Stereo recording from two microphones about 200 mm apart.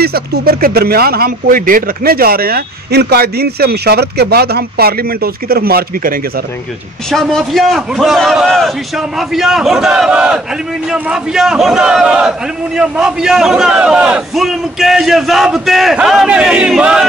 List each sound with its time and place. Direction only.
0.0 s speech: 50° right (ahead or behind)
7.1 s a man's voice: centre (ahead or behind)